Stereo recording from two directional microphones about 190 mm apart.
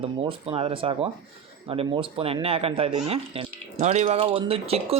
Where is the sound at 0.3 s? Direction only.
30° right (ahead or behind).